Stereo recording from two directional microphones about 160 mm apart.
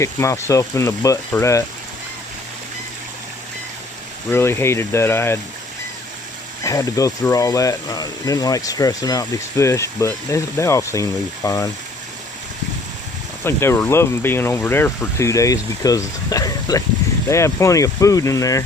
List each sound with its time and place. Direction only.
0.0 s speech: 20° left (ahead or behind)
4.3 s speech: 15° left (ahead or behind)
6.7 s speech: 20° left (ahead or behind)
13.4 s speech: 15° left (ahead or behind)